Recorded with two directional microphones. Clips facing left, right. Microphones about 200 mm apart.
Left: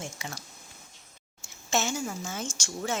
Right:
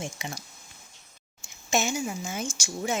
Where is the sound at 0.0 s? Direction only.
15° right (ahead or behind).